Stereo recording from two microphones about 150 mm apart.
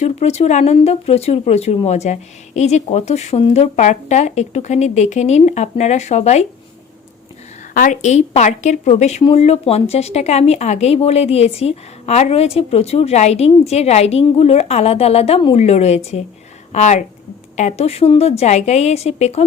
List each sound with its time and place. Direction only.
0.0 s speech: 45° left (ahead or behind)
7.7 s speech: 60° left (ahead or behind); by 19.5 s 45° left (ahead or behind)